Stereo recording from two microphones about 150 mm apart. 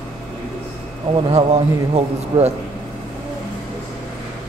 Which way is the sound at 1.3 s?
45° right (ahead or behind).